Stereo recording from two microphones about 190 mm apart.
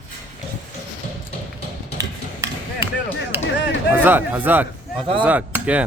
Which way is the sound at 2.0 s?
15° right (ahead or behind).